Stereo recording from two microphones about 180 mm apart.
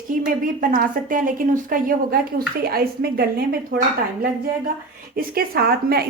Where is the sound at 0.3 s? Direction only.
50° right (ahead or behind).